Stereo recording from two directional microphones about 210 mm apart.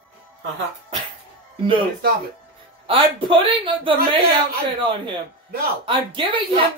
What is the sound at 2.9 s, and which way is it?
Speech, 25° right (ahead or behind).